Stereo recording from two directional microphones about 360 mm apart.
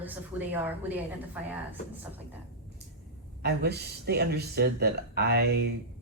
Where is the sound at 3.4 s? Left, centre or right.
Right.